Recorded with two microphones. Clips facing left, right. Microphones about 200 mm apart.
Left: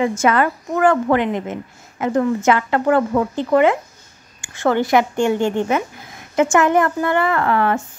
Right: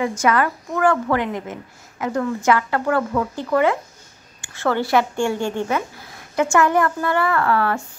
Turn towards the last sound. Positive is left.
turn(degrees=20)  # may be behind; listen again after turning